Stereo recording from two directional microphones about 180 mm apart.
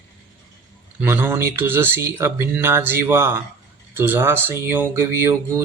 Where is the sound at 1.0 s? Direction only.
10° right (ahead or behind).